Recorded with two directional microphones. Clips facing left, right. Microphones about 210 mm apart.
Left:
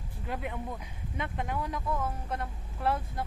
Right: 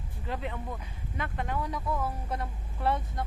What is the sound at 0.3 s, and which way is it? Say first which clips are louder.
Speech: even; 10° left (ahead or behind).